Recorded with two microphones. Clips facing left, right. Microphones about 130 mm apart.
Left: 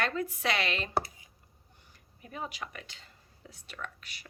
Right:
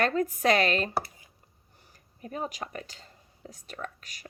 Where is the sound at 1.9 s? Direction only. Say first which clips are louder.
Right 6 dB; 40° right (ahead or behind).